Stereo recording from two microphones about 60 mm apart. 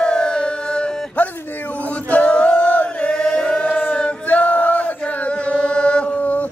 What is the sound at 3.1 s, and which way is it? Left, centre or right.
Chant, centre.